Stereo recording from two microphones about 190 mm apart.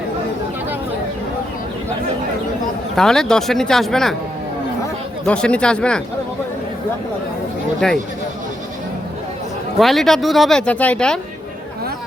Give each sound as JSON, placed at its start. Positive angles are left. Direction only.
{"t": 2.9, "sound": "speech", "side_deg": 5}
{"t": 5.2, "sound": "speech", "side_deg": 5}
{"t": 7.8, "sound": "speech", "side_deg": 5}
{"t": 9.7, "sound": "speech", "side_deg": 0}